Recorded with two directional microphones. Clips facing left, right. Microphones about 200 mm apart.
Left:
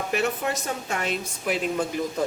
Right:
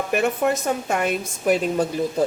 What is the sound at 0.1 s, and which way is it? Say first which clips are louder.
A woman's voice: right 6 dB; 55° right (ahead or behind).